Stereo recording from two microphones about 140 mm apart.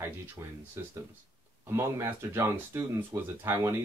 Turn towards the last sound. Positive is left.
turn(degrees=-15)  # may be behind; listen again after turning